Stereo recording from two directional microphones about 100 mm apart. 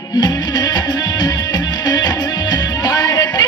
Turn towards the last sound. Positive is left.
turn(degrees=40)  # may be behind; listen again after turning